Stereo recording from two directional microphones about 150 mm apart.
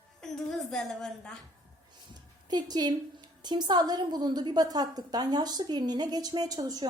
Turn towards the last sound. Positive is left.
turn(degrees=-25)  # may be behind; listen again after turning